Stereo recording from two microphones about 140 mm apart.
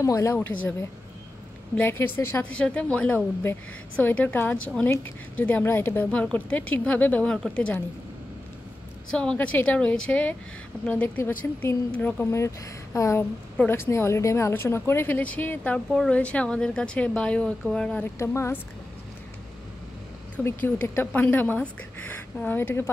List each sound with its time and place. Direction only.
0.0 s a woman's voice: 20° left (ahead or behind)
1.8 s speech: 15° left (ahead or behind)
9.1 s speech: 5° left (ahead or behind)
20.4 s speech: 15° left (ahead or behind)